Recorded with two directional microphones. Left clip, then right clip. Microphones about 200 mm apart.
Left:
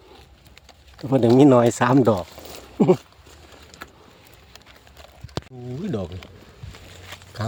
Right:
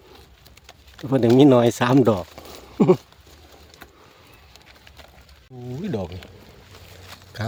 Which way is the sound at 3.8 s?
45° left (ahead or behind).